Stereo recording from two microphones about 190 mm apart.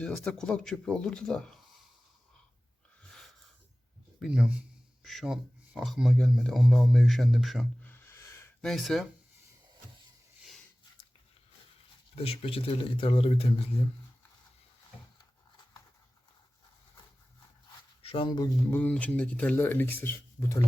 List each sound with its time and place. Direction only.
0.0 s speech: 5° left (ahead or behind)
3.1 s a sound: centre (ahead or behind)
4.2 s speech: 5° right (ahead or behind)
8.1 s a sound: 15° left (ahead or behind)
8.6 s speech: centre (ahead or behind)
12.1 s speech: 30° left (ahead or behind)
18.0 s speech: 30° left (ahead or behind); by 20.6 s 10° left (ahead or behind)